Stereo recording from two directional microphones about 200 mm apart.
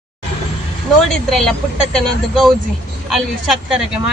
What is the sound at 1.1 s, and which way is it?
Speech, centre (ahead or behind).